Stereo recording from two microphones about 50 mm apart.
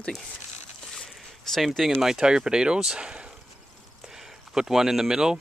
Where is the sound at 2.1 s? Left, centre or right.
Centre.